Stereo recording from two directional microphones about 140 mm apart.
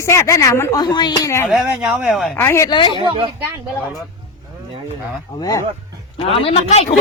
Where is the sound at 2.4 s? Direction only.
15° left (ahead or behind).